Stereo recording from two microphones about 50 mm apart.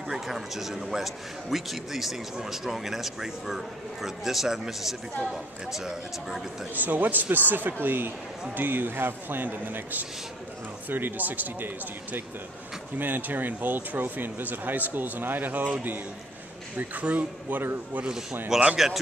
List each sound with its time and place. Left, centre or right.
0.1 s speech: centre
6.7 s speech: right
16.7 s speech: right
17.5 s speech: right
18.5 s speech: centre